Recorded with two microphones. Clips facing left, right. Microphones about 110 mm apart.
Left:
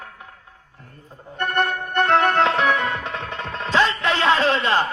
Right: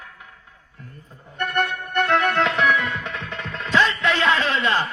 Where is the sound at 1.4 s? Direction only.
35° left (ahead or behind).